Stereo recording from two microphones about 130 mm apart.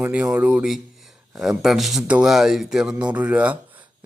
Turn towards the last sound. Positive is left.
turn(degrees=-10)  # may be behind; listen again after turning